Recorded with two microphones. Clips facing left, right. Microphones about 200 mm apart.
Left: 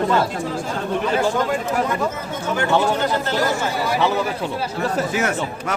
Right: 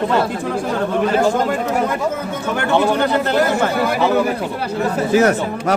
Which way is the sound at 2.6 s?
60° right (ahead or behind).